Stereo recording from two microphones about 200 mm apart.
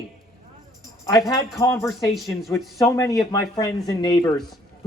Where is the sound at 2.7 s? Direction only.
15° left (ahead or behind).